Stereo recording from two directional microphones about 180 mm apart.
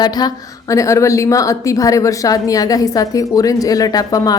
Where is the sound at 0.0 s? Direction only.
20° left (ahead or behind).